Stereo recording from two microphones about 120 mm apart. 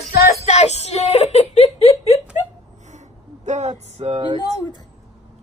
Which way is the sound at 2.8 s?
75° right (ahead or behind).